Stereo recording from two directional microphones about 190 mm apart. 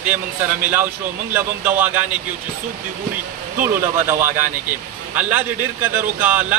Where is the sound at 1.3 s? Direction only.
10° right (ahead or behind).